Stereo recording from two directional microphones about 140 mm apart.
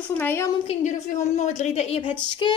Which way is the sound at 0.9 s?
55° left (ahead or behind).